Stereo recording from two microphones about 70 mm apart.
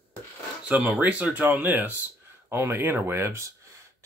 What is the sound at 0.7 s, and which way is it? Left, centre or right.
Speech, centre.